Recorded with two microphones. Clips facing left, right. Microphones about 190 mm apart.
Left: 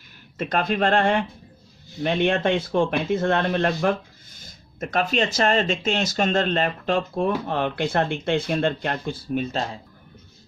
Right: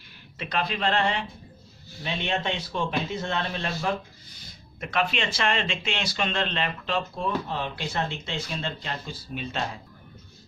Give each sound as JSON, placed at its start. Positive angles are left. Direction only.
{"t": 0.4, "sound": "speech", "side_deg": 50}
{"t": 4.4, "sound": "speech", "side_deg": 45}